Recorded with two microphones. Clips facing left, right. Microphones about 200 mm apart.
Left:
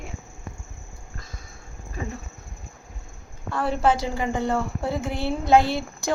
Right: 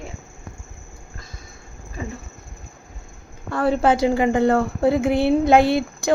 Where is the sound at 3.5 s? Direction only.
60° right (ahead or behind).